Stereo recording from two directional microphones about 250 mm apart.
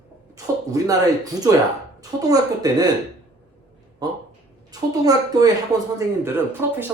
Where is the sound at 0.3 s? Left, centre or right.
Centre.